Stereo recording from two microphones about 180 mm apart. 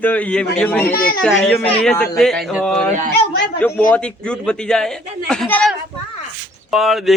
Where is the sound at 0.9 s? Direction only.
55° left (ahead or behind).